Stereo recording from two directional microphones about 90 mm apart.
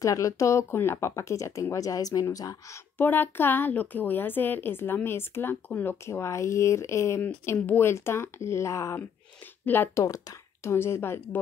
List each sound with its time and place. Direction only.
0.0 s speech: 35° left (ahead or behind)
3.0 s a woman's voice: 20° left (ahead or behind)
6.0 s speech: 30° left (ahead or behind)
7.2 s a woman's voice: 20° left (ahead or behind)
9.7 s a woman's voice: 25° left (ahead or behind)
10.0 s a woman's voice: 35° left (ahead or behind)